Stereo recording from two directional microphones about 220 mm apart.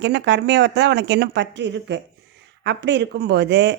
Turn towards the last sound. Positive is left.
turn(degrees=-50)  # may be behind; listen again after turning